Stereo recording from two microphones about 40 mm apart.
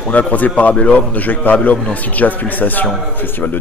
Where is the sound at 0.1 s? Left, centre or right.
Left.